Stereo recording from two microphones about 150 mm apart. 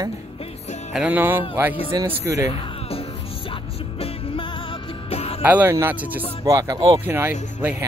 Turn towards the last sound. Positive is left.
turn(degrees=-10)  # may be behind; listen again after turning